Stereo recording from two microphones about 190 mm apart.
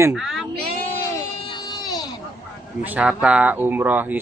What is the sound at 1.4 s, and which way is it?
Baby cry, 20° left (ahead or behind).